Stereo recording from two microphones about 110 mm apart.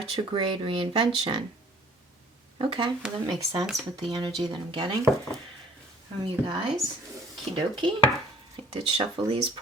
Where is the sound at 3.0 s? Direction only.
5° right (ahead or behind).